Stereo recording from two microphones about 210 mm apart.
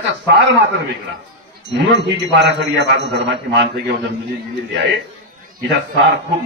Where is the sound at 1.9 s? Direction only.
55° right (ahead or behind).